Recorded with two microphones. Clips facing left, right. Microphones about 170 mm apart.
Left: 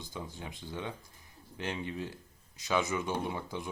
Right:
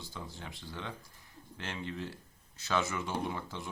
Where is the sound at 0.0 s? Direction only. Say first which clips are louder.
Left 3 dB; 15° left (ahead or behind).